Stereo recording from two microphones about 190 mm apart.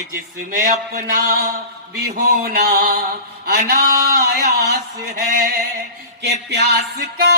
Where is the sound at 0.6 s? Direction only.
50° right (ahead or behind).